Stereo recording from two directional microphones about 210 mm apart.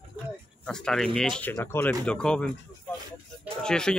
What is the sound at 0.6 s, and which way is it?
Speech, 5° left (ahead or behind).